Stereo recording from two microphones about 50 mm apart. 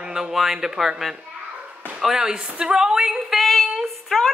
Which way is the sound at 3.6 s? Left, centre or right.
Centre.